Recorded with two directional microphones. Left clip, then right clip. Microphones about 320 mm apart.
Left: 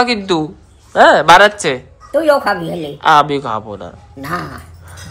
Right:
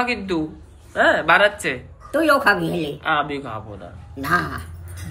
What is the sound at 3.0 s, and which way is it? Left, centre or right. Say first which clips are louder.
Speech: left 13 dB; centre.